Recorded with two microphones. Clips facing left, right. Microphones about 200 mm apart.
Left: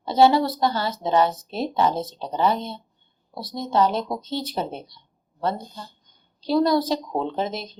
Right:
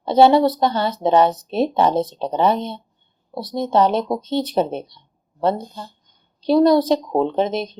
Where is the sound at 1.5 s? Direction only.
65° right (ahead or behind).